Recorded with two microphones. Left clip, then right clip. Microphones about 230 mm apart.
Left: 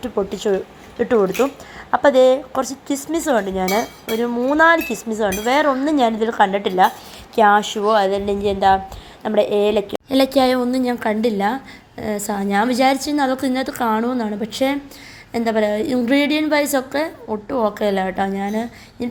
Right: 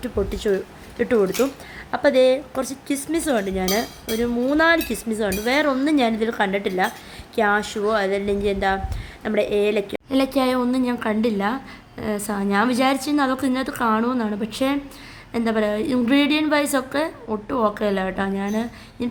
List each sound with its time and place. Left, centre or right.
0.0 s a woman's voice: centre